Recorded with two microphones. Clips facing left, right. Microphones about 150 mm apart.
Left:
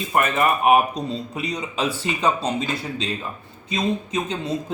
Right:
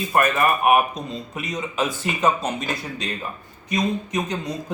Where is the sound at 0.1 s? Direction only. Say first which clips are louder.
Even; 25° left (ahead or behind).